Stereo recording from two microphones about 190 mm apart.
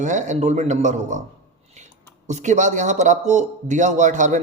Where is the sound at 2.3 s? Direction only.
40° right (ahead or behind).